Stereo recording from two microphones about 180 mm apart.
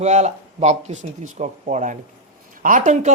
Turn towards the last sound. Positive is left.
turn(degrees=-45)  # may be behind; listen again after turning